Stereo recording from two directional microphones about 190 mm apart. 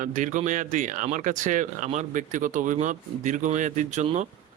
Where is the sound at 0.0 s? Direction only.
40° right (ahead or behind).